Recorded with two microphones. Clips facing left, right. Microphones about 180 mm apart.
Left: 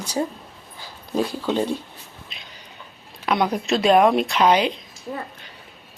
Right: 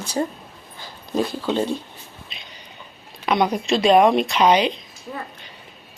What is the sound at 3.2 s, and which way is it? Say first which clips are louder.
Speech: right 1 dB; 5° left (ahead or behind).